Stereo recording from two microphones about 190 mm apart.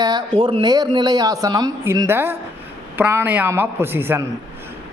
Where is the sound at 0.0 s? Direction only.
20° right (ahead or behind).